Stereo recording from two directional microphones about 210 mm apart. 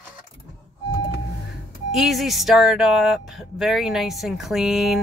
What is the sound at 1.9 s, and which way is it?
Speech, centre (ahead or behind).